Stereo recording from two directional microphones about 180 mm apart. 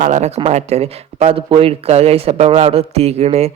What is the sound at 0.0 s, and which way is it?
A man's voice, 40° right (ahead or behind).